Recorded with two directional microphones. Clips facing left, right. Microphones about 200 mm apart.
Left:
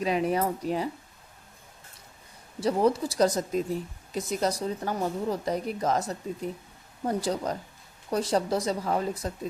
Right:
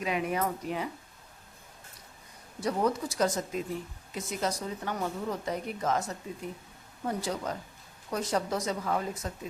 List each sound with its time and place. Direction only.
0.0 s speech: 35° left (ahead or behind)
2.6 s speech: 30° left (ahead or behind)